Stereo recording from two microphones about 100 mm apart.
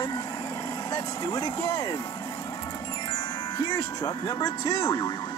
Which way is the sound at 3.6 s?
30° left (ahead or behind).